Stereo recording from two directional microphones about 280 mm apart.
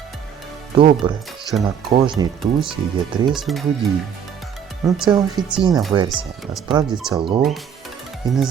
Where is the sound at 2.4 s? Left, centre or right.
Centre.